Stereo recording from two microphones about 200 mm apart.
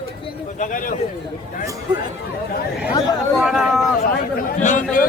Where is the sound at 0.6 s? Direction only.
40° left (ahead or behind).